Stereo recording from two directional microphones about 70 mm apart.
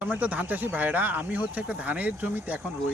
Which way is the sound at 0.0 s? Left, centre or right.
Right.